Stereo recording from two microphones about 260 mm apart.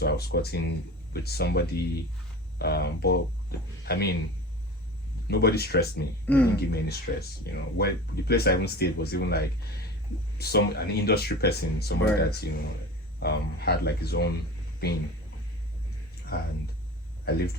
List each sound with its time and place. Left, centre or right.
0.0 s speech: left
5.3 s speech: left
16.3 s speech: left